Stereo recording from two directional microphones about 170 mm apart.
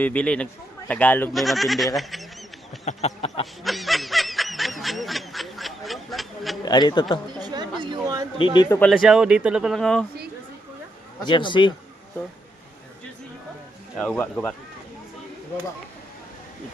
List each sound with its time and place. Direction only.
0.0 s speech: 10° left (ahead or behind)
1.3 s speech: centre (ahead or behind)
2.8 s a sound: 40° left (ahead or behind)
3.6 s snicker: centre (ahead or behind)
6.7 s a man's voice: 25° left (ahead or behind)
7.3 s a sound: 25° right (ahead or behind)
8.4 s a man's voice: 25° left (ahead or behind)
8.8 s speech: centre (ahead or behind)
11.2 s a man's voice: 25° left (ahead or behind)
13.9 s speech: 5° left (ahead or behind)